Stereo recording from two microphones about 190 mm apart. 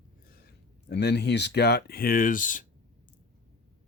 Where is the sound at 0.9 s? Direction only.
60° left (ahead or behind); by 2.6 s 45° left (ahead or behind).